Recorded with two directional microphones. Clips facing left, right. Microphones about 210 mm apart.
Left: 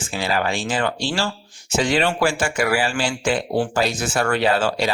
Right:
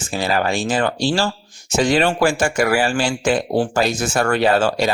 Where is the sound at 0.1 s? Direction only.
45° right (ahead or behind).